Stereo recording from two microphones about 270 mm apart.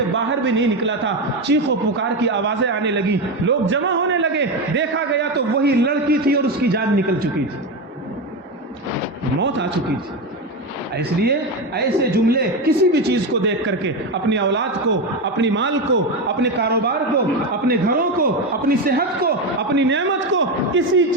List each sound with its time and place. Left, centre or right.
0.4 s a man's voice: right
9.4 s a man's voice: right
10.9 s a man's voice: right
19.7 s a sound: right